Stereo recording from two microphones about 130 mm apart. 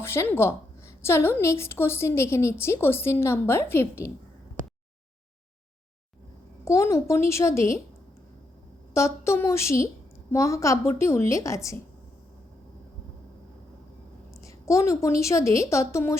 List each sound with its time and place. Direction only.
0.0 s a woman's voice: 20° left (ahead or behind)
6.7 s a woman's voice: 20° left (ahead or behind)
8.9 s a woman's voice: 20° left (ahead or behind)
14.4 s a woman's voice: 25° left (ahead or behind)